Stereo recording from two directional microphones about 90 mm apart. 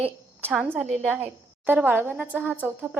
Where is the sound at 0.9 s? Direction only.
10° right (ahead or behind).